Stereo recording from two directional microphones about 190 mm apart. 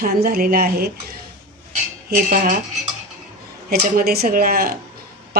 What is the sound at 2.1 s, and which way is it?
Speech, 50° right (ahead or behind).